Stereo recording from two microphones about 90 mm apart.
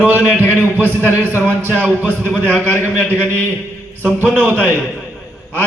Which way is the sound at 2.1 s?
20° right (ahead or behind).